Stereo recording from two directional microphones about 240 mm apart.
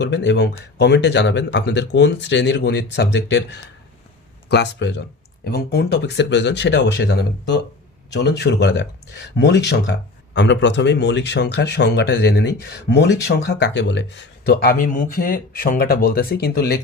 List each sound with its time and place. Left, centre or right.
0.0 s speech: left